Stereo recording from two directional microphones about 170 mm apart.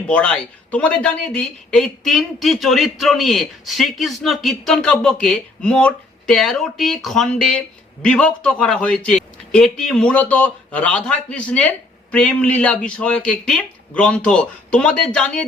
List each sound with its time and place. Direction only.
0.1 s speech: 5° left (ahead or behind)